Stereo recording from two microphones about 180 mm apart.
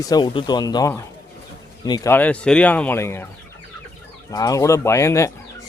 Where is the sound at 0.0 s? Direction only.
20° left (ahead or behind).